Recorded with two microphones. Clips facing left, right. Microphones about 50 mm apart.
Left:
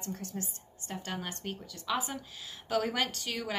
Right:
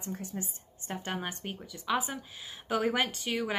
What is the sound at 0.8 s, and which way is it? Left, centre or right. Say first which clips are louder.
A woman's voice: right 3 dB; right.